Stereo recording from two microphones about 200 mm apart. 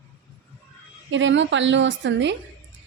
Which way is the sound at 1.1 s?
65° right (ahead or behind).